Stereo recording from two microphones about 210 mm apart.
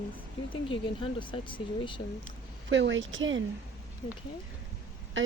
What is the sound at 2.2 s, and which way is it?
Speech, 60° right (ahead or behind).